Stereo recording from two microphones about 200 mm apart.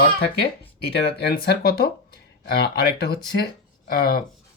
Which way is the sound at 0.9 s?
55° left (ahead or behind).